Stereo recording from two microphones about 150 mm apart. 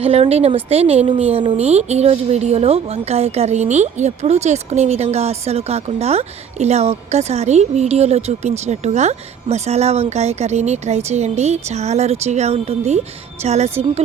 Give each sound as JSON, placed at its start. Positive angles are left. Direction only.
{"t": 0.0, "sound": "speech", "side_deg": -40}